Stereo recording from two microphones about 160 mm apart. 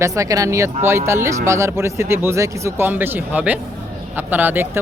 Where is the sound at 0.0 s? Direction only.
20° right (ahead or behind).